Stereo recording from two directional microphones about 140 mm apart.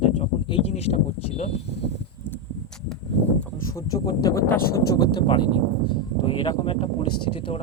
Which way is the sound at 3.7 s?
25° left (ahead or behind).